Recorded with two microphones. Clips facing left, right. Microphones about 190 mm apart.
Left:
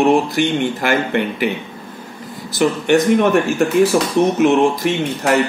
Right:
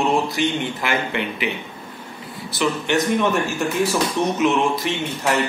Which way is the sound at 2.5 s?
50° left (ahead or behind).